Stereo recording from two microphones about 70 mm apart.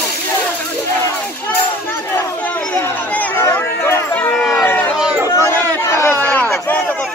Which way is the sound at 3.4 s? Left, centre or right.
Left.